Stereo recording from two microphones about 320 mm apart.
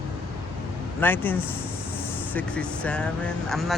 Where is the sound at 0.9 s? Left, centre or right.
Centre.